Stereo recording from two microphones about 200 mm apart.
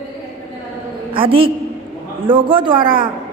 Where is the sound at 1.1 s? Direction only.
25° right (ahead or behind).